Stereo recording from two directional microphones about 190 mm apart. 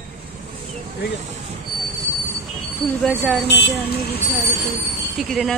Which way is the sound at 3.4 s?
65° left (ahead or behind).